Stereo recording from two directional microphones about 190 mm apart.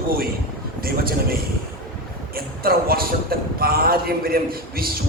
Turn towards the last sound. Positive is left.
turn(degrees=-50)  # may be behind; listen again after turning